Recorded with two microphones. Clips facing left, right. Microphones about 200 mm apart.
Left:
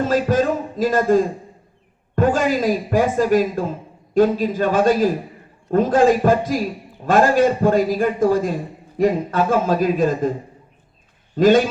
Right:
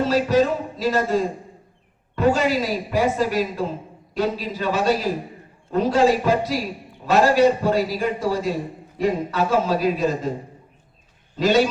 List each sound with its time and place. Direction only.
0.0 s a man's voice: 50° left (ahead or behind)
11.3 s a man's voice: 50° left (ahead or behind)